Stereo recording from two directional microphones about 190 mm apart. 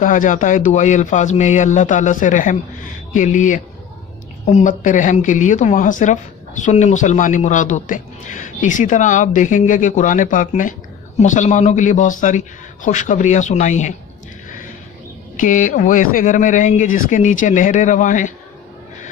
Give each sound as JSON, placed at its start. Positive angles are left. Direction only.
{"t": 0.0, "sound": "a woman's voice", "side_deg": 45}
{"t": 15.3, "sound": "a woman's voice", "side_deg": 45}